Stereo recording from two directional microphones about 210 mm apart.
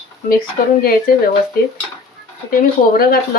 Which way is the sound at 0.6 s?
45° left (ahead or behind).